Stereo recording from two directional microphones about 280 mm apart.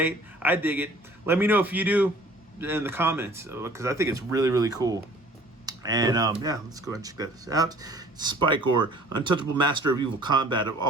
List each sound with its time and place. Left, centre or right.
0.0 s speech: centre